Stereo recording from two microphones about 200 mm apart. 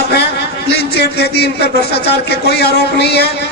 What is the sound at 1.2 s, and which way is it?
A man's voice, 55° left (ahead or behind).